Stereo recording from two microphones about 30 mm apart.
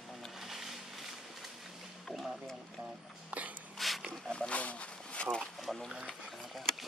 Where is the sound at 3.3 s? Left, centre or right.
Right.